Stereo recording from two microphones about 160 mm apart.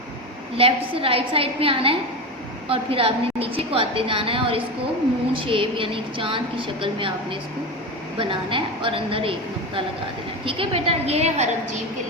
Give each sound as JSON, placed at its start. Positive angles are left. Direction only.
{"t": 0.5, "sound": "a woman's voice", "side_deg": -35}
{"t": 10.4, "sound": "a woman's voice", "side_deg": -35}